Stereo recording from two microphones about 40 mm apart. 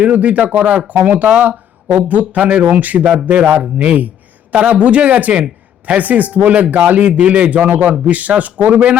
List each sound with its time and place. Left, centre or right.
0.0 s speech: right
3.0 s speech: centre
3.2 s speech: right
3.5 s speech: right
4.5 s speech: right